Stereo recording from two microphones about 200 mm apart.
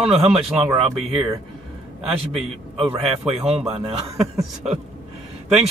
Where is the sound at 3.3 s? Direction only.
30° right (ahead or behind).